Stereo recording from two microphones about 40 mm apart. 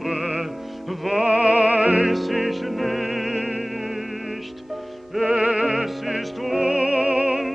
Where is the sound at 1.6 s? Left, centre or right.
Right.